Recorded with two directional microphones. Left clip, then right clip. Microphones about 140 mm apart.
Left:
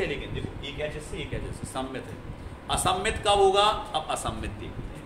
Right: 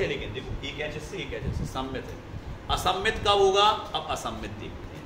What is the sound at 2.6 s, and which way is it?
A man's voice, 35° left (ahead or behind).